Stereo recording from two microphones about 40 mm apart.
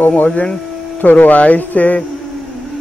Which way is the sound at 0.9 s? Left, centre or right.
Left.